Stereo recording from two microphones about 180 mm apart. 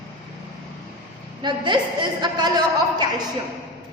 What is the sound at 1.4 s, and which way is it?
A woman's voice, 25° right (ahead or behind).